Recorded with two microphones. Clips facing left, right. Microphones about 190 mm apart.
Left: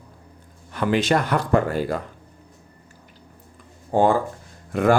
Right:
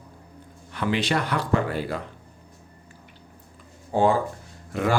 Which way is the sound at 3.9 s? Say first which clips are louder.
Left 2 dB; 50° left (ahead or behind).